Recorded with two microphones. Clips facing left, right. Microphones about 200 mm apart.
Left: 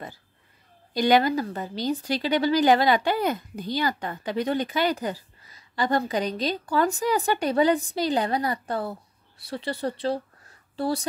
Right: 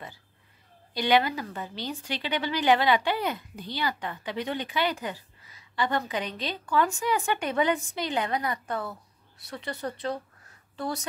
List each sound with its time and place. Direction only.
0.9 s a woman's voice: 40° left (ahead or behind)